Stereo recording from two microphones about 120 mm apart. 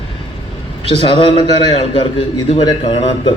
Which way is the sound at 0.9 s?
50° left (ahead or behind).